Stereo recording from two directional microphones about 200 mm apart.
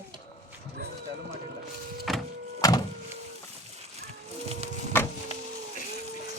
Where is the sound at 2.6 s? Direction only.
15° left (ahead or behind).